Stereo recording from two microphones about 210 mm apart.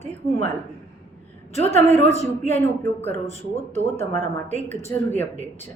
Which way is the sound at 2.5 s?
10° left (ahead or behind).